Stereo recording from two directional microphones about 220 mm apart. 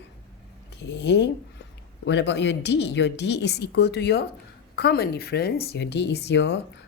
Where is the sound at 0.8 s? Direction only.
50° left (ahead or behind).